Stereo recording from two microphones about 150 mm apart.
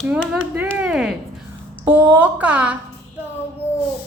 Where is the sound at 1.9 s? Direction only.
10° right (ahead or behind).